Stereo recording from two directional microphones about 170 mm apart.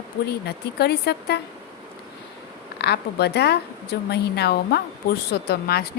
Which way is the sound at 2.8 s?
75° left (ahead or behind).